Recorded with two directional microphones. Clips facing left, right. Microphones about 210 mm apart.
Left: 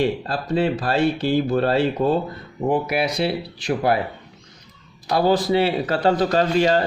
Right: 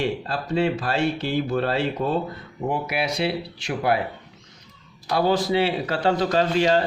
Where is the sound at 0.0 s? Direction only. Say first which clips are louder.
Left 4 dB; 35° left (ahead or behind).